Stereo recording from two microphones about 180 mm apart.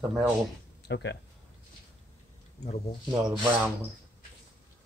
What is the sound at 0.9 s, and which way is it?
Speech, 75° left (ahead or behind).